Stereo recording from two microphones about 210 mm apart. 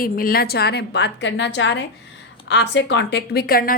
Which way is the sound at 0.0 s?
45° left (ahead or behind).